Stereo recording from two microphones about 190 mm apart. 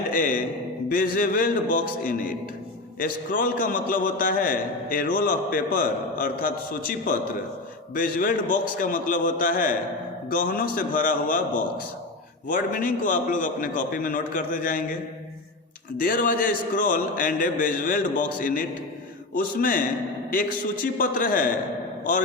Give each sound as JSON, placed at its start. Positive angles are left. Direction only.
{"t": 0.1, "sound": "a sound", "side_deg": 45}
{"t": 0.9, "sound": "a man's voice", "side_deg": 45}
{"t": 16.0, "sound": "a man's voice", "side_deg": 45}
{"t": 21.0, "sound": "a man's voice", "side_deg": 45}